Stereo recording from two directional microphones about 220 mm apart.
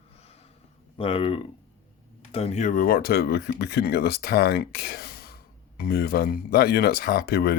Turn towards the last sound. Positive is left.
turn(degrees=45)  # may be behind; listen again after turning